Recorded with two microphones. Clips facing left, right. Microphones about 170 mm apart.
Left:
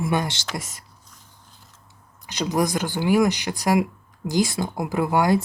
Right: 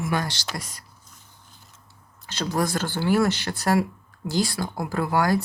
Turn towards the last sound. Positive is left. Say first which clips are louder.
# left 3 dB
turn(degrees=20)  # may be behind; listen again after turning